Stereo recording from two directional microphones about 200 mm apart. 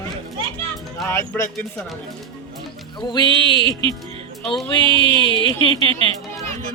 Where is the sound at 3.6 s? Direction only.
25° right (ahead or behind).